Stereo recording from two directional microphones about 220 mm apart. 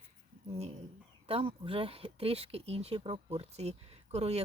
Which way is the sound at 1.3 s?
25° right (ahead or behind).